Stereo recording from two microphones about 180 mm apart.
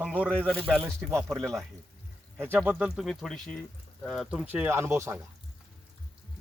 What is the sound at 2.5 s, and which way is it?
Speech, 5° right (ahead or behind).